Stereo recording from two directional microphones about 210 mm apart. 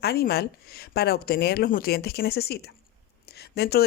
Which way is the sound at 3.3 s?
50° left (ahead or behind).